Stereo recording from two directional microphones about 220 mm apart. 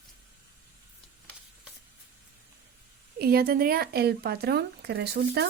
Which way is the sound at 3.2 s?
45° right (ahead or behind).